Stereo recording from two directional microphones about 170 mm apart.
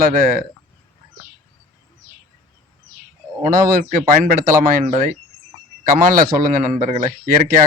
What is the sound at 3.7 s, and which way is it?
A man's voice, 50° right (ahead or behind).